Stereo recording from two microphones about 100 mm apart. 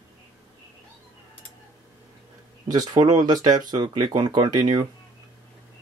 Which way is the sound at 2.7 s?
40° right (ahead or behind).